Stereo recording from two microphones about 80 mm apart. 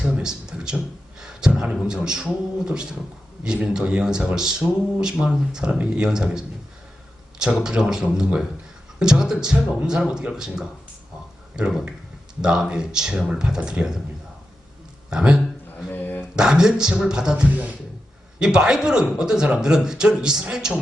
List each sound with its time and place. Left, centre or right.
0.0 s a man's voice: centre
15.1 s speech: centre
15.9 s a sound: left
16.3 s speech: centre